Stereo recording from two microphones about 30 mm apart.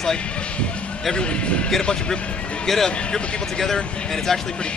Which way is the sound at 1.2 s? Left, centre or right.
Left.